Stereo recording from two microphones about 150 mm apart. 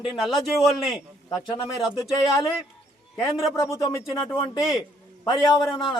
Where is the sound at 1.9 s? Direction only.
25° left (ahead or behind).